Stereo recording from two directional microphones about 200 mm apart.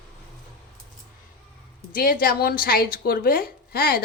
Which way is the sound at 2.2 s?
50° left (ahead or behind).